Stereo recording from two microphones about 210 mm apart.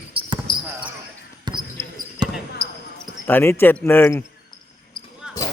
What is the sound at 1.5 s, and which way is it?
Basketball bounce, 20° right (ahead or behind).